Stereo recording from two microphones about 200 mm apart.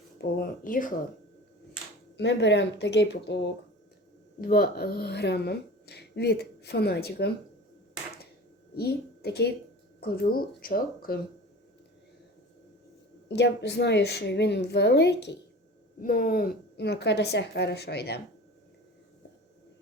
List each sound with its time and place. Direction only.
0.2 s speech: 50° left (ahead or behind)
2.1 s a woman's voice: 60° left (ahead or behind)
4.4 s speech: 45° left (ahead or behind)
8.7 s a woman's voice: 55° left (ahead or behind)
13.2 s a woman's voice: 60° left (ahead or behind)
16.0 s a woman's voice: 45° left (ahead or behind)